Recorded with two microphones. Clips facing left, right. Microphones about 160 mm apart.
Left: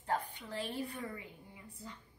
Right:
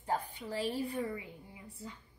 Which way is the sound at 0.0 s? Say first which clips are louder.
Right 1 dB; 10° right (ahead or behind).